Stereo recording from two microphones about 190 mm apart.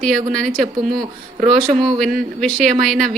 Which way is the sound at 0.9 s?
45° right (ahead or behind).